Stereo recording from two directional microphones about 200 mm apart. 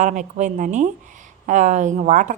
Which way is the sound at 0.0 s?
40° right (ahead or behind).